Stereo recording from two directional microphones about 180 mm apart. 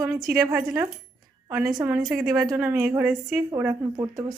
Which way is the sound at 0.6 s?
5° right (ahead or behind).